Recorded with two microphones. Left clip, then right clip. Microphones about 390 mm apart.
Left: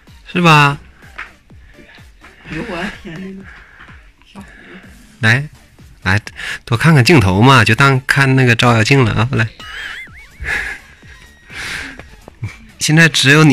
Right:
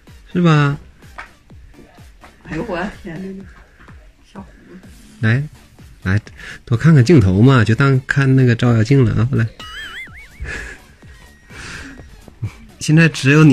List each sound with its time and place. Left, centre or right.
0.3 s speech: centre
5.2 s speech: centre
11.5 s music: centre
12.3 s a sound: left
12.7 s speech: centre